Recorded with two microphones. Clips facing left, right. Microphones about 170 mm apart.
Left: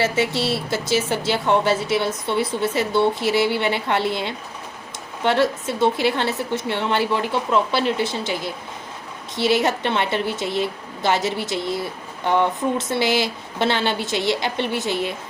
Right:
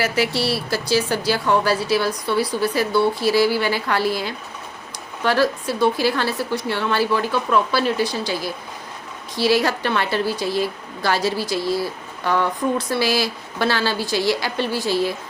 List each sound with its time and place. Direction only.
0.0 s a woman's voice: 25° left (ahead or behind)